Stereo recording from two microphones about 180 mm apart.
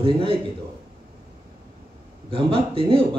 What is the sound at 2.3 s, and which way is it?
Speech, 30° right (ahead or behind).